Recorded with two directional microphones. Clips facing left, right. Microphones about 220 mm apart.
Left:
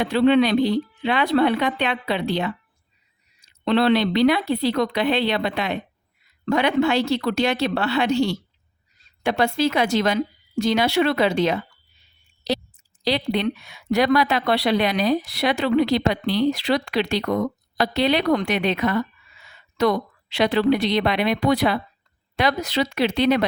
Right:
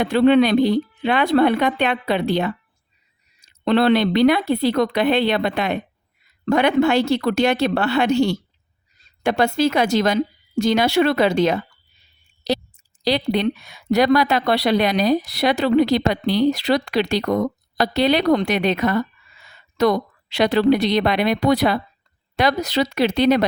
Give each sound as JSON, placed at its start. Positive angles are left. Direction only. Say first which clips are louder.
{"t": 0.0, "sound": "speech", "louder": "right 2 dB", "side_deg": -50}
{"t": 3.6, "sound": "speech", "louder": "right 2 dB", "side_deg": -50}
{"t": 13.1, "sound": "a woman's voice", "louder": "right 3 dB", "side_deg": -40}